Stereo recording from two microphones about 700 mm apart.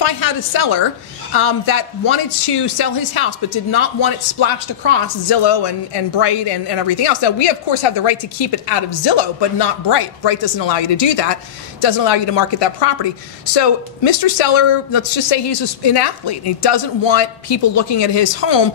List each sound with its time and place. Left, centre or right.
0.0 s speech: left